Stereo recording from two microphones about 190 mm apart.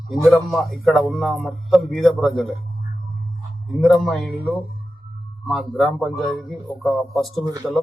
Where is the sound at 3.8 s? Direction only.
Centre (ahead or behind).